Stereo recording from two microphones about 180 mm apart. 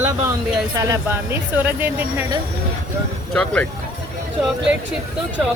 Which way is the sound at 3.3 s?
5° left (ahead or behind).